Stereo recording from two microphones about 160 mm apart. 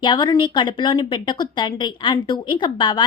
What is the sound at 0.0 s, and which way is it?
A woman's voice, 30° left (ahead or behind).